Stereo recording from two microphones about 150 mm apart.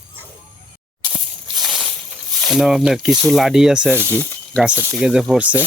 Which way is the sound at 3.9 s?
15° left (ahead or behind).